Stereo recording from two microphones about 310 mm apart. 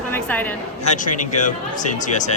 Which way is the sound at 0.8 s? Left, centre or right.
Left.